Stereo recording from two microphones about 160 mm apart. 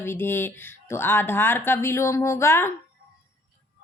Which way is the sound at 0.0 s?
15° left (ahead or behind).